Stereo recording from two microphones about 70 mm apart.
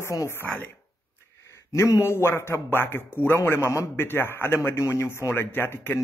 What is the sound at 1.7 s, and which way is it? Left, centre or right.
A man's voice, left.